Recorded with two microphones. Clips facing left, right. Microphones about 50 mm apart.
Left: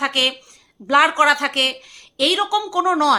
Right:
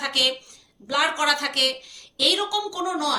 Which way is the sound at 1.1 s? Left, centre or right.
Left.